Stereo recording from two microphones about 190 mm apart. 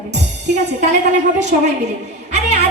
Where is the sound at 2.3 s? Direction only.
35° right (ahead or behind).